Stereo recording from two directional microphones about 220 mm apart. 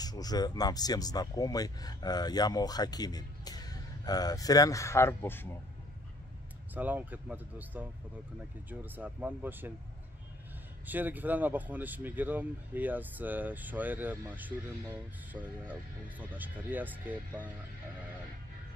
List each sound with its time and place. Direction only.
0.0 s speech: 15° left (ahead or behind)
6.7 s speech: 10° right (ahead or behind)
10.9 s speech: 10° right (ahead or behind)